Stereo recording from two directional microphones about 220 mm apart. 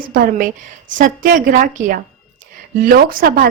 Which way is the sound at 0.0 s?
40° right (ahead or behind).